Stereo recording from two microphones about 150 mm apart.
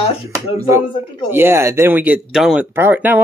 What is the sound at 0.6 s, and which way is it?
Speech, 25° right (ahead or behind).